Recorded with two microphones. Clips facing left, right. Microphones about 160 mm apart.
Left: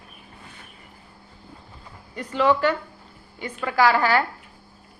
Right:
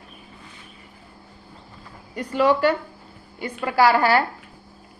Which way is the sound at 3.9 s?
35° right (ahead or behind).